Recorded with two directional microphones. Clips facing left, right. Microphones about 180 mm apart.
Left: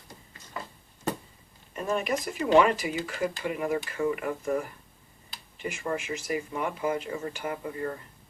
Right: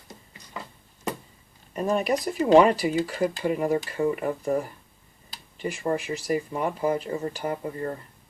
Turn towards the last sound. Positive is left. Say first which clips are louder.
# right 3 dB
turn(degrees=-35)  # may be behind; listen again after turning